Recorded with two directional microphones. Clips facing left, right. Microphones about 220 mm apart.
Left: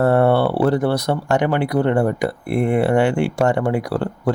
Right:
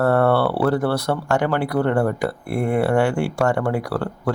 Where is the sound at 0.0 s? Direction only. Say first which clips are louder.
Left 2 dB; 20° left (ahead or behind).